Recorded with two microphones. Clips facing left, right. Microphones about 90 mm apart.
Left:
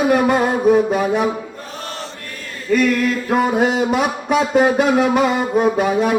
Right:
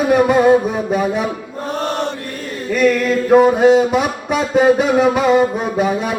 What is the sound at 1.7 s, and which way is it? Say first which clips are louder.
Chant: right 11 dB; 55° right (ahead or behind).